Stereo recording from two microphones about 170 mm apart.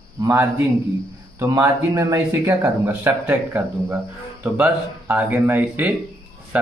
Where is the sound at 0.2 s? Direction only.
15° right (ahead or behind).